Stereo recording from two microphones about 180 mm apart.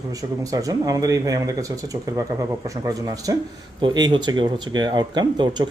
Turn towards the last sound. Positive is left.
turn(degrees=-25)  # may be behind; listen again after turning